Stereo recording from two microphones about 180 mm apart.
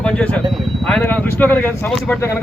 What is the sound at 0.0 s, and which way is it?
Speech, 5° left (ahead or behind).